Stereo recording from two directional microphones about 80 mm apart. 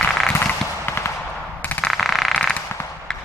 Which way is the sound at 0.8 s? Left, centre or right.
Left.